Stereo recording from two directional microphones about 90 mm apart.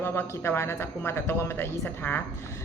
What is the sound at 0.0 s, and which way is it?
Speech, 25° left (ahead or behind).